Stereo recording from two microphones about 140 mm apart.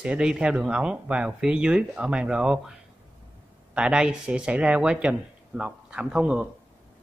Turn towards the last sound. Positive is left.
turn(degrees=-10)  # may be behind; listen again after turning